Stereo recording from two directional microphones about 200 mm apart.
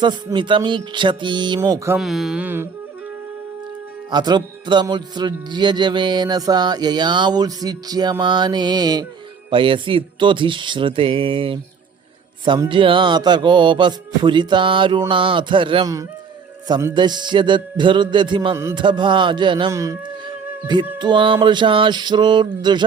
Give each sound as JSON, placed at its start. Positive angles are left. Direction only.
{"t": 0.0, "sound": "speech", "side_deg": -20}
{"t": 2.0, "sound": "speech", "side_deg": 0}
{"t": 4.1, "sound": "speech", "side_deg": -20}